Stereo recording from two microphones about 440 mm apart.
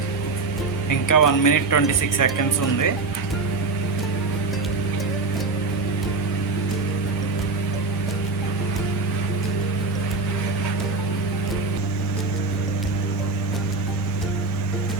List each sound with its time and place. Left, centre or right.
0.9 s speech: left